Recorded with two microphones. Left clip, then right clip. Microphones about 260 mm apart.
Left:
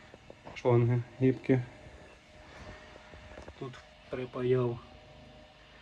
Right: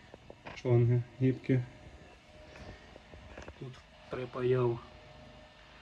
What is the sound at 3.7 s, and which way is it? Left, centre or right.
Speech, right.